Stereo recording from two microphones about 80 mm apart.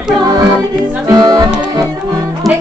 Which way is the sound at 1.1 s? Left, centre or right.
Right.